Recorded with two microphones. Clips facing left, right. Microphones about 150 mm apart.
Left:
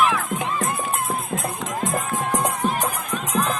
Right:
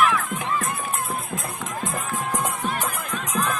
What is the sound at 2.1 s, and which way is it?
Music, 20° left (ahead or behind).